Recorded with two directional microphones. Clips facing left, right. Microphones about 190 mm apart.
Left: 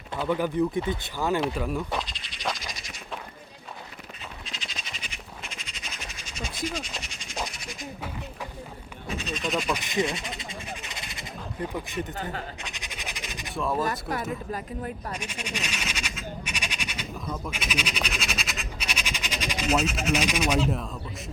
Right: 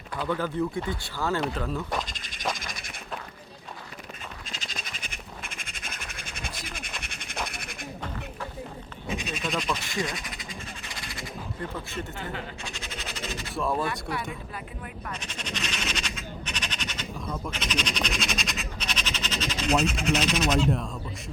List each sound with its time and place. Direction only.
0.3 s speech: 15° left (ahead or behind)
2.0 s frog: 45° right (ahead or behind)
2.6 s a sound: 55° right (ahead or behind)
4.6 s a sound: 45° right (ahead or behind)
9.0 s speech: 15° right (ahead or behind)
9.5 s speech: 10° left (ahead or behind); by 10.4 s 25° left (ahead or behind)
10.8 s a sound: 20° left (ahead or behind)
13.5 s speech: centre (ahead or behind)
13.8 s speech: 40° left (ahead or behind)
15.1 s frog: 10° left (ahead or behind)
17.2 s speech: centre (ahead or behind)